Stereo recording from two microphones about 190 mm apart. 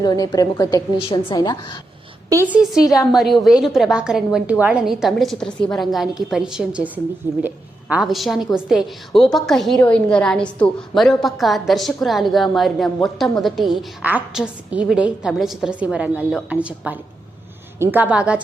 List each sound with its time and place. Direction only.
0.0 s a woman's voice: 20° left (ahead or behind)
2.5 s a woman's voice: 5° right (ahead or behind)